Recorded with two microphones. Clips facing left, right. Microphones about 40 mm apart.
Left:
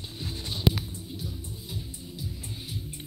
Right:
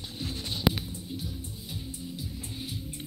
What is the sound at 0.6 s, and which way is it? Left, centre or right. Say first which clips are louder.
Music: left 1 dB; centre.